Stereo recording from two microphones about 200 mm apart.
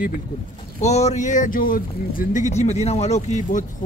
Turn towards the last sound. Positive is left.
turn(degrees=40)  # may be behind; listen again after turning